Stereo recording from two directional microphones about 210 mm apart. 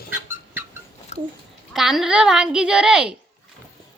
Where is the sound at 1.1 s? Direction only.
30° left (ahead or behind).